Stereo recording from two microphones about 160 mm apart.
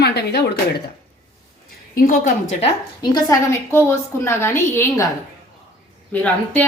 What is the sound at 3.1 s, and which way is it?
A woman's voice, 20° left (ahead or behind).